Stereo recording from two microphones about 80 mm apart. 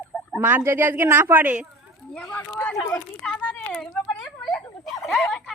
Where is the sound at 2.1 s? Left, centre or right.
Left.